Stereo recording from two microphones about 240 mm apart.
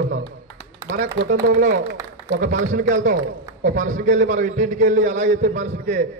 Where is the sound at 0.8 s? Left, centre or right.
Right.